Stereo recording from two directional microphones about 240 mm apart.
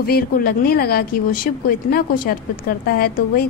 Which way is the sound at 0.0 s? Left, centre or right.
Left.